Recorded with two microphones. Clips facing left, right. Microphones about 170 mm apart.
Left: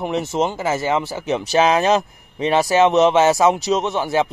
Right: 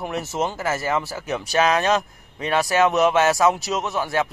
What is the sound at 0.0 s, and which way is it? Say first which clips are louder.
A man's voice: left 5 dB; 20° left (ahead or behind).